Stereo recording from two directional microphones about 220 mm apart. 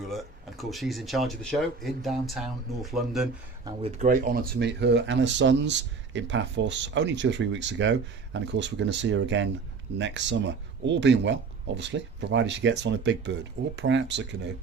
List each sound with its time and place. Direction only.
0.1 s speech: centre (ahead or behind)
3.8 s speech: 35° right (ahead or behind); by 14.5 s 55° right (ahead or behind)